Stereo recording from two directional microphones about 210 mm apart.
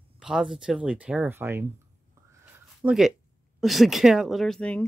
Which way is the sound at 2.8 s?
Centre (ahead or behind).